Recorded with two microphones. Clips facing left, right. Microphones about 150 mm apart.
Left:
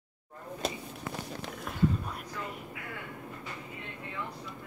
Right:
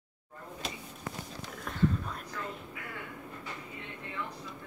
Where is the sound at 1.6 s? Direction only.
10° left (ahead or behind).